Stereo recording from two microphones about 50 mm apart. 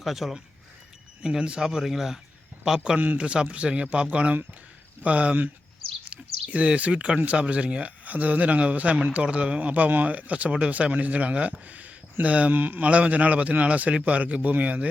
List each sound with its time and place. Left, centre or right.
0.0 s speech: centre; by 14.8 s right